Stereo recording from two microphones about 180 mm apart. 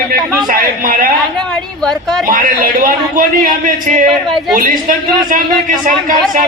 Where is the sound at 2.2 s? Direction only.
50° right (ahead or behind).